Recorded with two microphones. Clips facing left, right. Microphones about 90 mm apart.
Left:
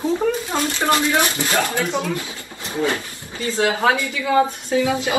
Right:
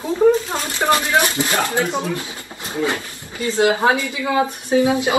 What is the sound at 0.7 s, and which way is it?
Speech, 25° right (ahead or behind).